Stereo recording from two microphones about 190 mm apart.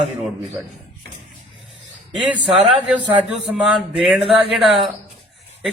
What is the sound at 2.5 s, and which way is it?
A man's voice, centre (ahead or behind).